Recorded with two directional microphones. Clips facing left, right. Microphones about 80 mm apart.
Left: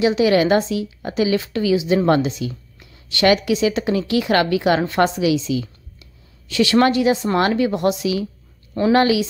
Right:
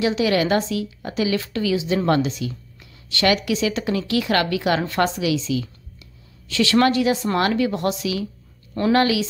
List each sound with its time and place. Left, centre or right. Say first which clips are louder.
0.0 s a woman's voice: left 4 dB; left